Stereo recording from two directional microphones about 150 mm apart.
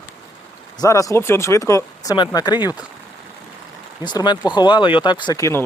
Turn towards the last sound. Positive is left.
turn(degrees=20)  # may be behind; listen again after turning